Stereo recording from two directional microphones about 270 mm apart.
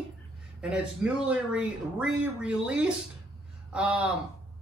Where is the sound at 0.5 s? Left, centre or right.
Centre.